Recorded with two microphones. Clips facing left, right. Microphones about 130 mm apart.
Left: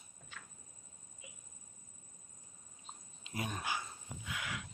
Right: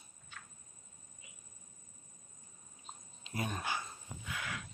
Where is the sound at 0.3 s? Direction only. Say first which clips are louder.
Even; 90° left.